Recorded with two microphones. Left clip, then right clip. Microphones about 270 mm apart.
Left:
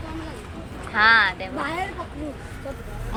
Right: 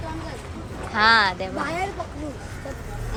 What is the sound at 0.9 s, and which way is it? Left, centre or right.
Speech, centre.